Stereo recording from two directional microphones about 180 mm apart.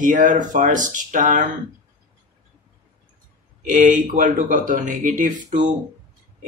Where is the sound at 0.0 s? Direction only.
45° right (ahead or behind).